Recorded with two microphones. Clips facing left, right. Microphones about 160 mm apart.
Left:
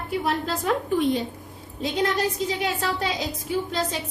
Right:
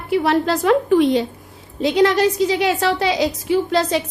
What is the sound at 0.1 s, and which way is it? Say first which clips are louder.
A woman's voice: right 9 dB; 85° right.